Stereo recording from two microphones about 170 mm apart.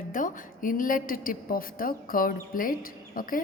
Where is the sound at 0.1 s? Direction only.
50° left (ahead or behind).